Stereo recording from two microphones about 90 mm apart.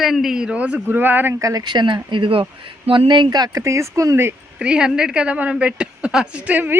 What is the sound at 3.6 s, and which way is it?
Speech, 35° right (ahead or behind).